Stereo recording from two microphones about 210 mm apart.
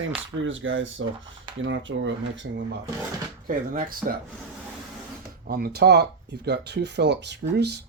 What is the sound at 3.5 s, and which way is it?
Speech, 40° right (ahead or behind).